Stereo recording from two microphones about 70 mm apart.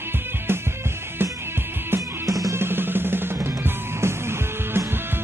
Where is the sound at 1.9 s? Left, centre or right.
Right.